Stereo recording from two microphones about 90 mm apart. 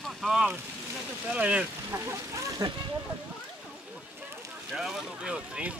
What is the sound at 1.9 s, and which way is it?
Speech, 30° right (ahead or behind).